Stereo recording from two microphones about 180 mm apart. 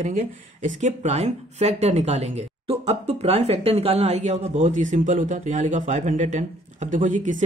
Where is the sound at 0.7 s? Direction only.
40° right (ahead or behind).